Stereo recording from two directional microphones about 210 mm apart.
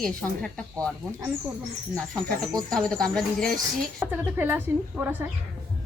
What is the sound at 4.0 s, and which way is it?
A woman's voice, 10° right (ahead or behind).